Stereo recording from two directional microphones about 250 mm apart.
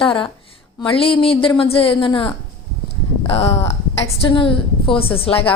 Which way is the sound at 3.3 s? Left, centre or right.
Left.